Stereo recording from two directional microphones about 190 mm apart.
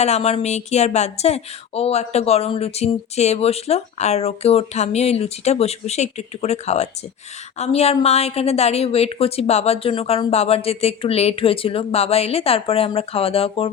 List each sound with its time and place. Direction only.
0.0 s speech: 35° left (ahead or behind)